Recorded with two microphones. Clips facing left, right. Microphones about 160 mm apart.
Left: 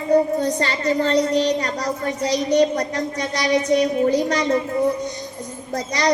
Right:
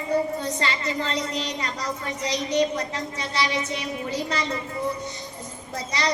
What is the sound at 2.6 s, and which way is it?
Speech, 40° left (ahead or behind).